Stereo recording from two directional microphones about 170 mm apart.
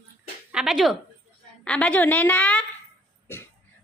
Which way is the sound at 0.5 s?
5° right (ahead or behind).